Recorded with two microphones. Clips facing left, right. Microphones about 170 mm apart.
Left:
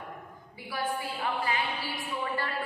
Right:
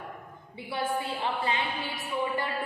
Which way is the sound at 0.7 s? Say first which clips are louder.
Right 2 dB; 25° right (ahead or behind).